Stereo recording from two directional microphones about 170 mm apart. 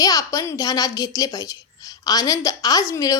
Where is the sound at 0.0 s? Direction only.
20° left (ahead or behind).